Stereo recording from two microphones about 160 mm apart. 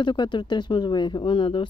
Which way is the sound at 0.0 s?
30° left (ahead or behind).